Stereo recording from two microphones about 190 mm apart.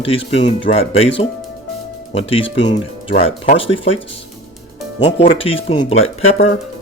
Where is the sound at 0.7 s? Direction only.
30° left (ahead or behind).